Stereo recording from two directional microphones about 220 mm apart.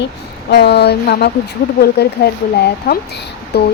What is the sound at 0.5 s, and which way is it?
Speech, 45° left (ahead or behind).